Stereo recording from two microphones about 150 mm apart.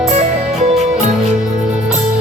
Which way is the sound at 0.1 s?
45° right (ahead or behind).